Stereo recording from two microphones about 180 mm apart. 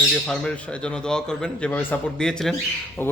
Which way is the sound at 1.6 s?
5° left (ahead or behind).